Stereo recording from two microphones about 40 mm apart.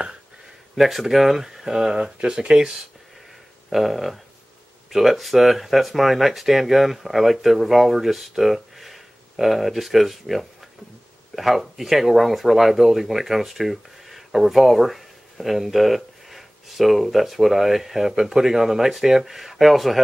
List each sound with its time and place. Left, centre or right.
0.7 s speech: centre
2.1 s speech: right
3.7 s speech: centre